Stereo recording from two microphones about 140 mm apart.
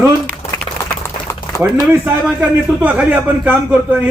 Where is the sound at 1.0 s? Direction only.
20° left (ahead or behind).